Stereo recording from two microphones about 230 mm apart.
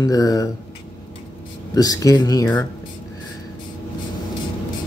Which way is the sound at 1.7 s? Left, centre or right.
Centre.